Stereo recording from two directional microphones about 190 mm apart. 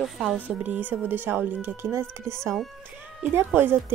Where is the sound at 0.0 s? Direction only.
Centre (ahead or behind).